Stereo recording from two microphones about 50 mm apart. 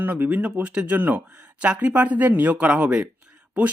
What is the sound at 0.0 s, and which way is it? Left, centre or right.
Speech, right.